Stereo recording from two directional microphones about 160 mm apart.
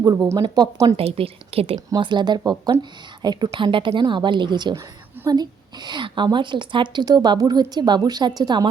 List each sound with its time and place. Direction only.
0.3 s a woman's voice: 25° right (ahead or behind)
0.9 s a woman's voice: 40° right (ahead or behind)